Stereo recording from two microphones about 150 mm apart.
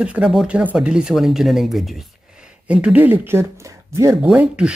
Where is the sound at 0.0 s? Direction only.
5° right (ahead or behind).